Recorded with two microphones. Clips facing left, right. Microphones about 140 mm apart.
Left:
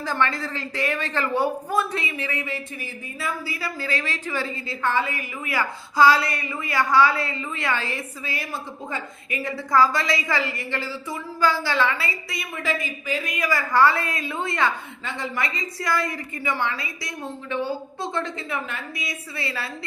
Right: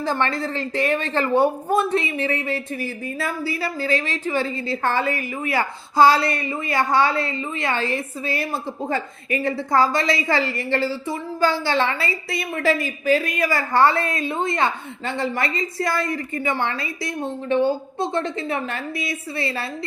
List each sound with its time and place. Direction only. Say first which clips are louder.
0.0 s a woman's voice: right 2 dB; 25° right (ahead or behind)
3.2 s a woman's voice: right 3 dB; 30° right (ahead or behind)
15.0 s a woman's voice: right 5 dB; 35° right (ahead or behind)
17.5 s a woman's voice: right 8 dB; 25° right (ahead or behind)